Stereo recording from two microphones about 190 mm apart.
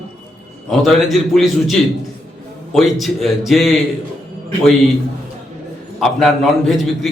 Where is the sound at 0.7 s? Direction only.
Centre (ahead or behind).